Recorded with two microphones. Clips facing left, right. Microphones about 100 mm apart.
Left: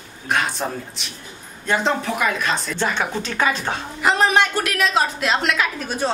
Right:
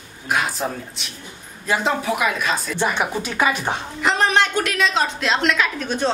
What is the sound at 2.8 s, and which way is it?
Speech, 15° right (ahead or behind).